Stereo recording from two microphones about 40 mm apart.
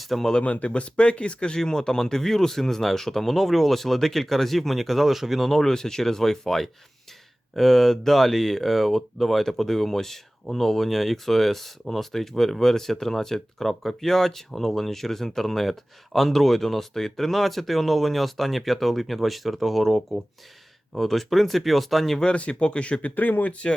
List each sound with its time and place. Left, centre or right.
0.0 s speech: centre
0.4 s speech: left; by 5.5 s centre
5.5 s speech: centre
22.2 s speech: left
23.1 s speech: left
23.5 s speech: left